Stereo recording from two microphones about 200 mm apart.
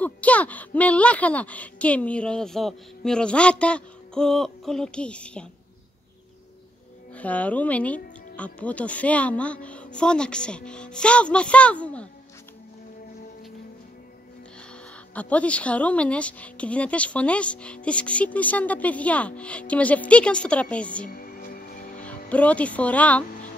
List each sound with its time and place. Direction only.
0.0 s speech: 5° left (ahead or behind)
7.2 s speech: 5° left (ahead or behind)
14.7 s speech: 5° left (ahead or behind)
21.1 s music: 45° left (ahead or behind)
22.3 s speech: 5° left (ahead or behind)